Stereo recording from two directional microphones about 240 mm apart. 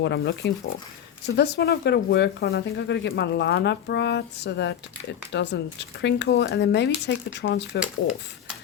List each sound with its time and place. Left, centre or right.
0.0 s speech: left